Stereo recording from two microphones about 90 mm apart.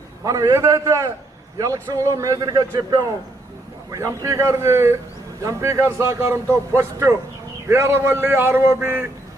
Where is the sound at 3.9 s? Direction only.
35° right (ahead or behind).